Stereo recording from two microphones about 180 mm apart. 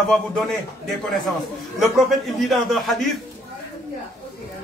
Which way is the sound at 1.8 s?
Centre (ahead or behind).